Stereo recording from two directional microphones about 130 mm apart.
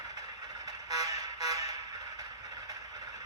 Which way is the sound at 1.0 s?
25° right (ahead or behind).